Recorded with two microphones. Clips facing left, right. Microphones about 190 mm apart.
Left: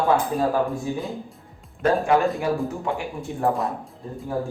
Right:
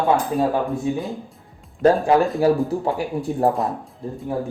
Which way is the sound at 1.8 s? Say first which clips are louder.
Right 5 dB; 35° right (ahead or behind).